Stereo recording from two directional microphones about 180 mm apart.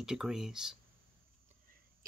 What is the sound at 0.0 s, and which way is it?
Speech, 5° right (ahead or behind).